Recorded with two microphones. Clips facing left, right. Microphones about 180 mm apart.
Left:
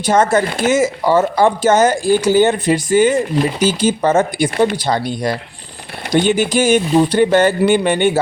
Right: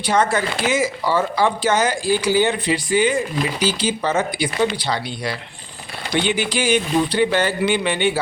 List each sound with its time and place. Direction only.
0.0 s speech: 45° left (ahead or behind)